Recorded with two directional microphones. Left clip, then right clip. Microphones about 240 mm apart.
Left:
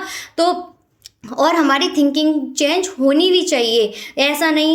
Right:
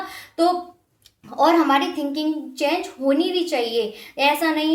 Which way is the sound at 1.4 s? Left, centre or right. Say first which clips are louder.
Left 2 dB; left.